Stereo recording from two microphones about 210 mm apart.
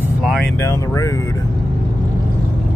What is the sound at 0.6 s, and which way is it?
Speech, 15° left (ahead or behind).